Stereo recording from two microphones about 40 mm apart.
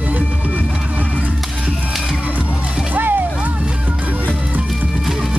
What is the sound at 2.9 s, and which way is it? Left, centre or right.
Music, right.